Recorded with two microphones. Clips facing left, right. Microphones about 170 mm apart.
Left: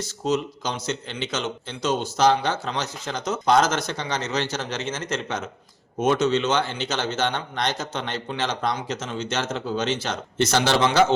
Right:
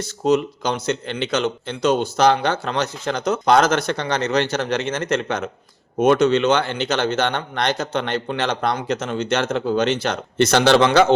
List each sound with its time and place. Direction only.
0.0 s a man's voice: 60° right (ahead or behind)